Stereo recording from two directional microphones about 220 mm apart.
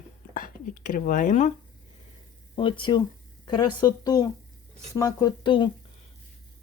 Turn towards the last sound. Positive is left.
turn(degrees=20)  # may be behind; listen again after turning